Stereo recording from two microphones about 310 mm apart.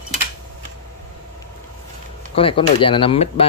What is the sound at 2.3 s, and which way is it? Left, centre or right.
Speech, centre.